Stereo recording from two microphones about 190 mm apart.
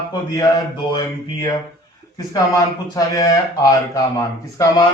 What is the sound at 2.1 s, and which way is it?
Speech, 20° left (ahead or behind).